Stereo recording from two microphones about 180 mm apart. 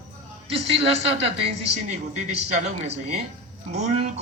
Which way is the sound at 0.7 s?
35° right (ahead or behind).